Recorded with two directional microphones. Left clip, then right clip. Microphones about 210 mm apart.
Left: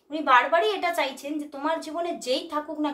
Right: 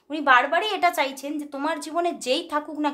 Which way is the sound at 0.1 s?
45° right (ahead or behind).